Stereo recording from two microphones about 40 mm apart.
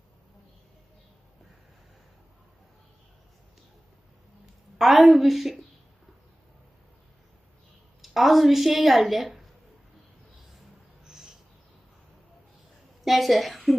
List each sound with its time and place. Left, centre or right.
4.8 s a woman's voice: centre
8.0 s a woman's voice: centre
11.0 s a sound: centre
13.1 s a woman's voice: centre